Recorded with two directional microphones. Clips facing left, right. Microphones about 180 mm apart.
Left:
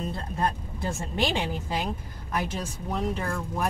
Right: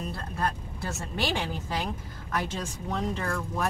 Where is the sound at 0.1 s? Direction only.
20° left (ahead or behind).